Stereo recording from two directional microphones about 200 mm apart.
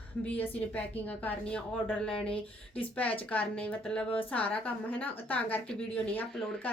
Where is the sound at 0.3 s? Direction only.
10° left (ahead or behind).